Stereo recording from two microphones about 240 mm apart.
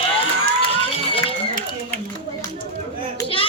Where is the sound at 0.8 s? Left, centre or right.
Left.